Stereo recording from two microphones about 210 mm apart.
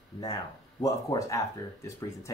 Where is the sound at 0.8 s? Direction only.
15° left (ahead or behind).